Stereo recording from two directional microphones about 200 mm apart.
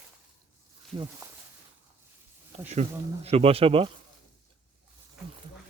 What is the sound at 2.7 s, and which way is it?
Speech, 30° right (ahead or behind).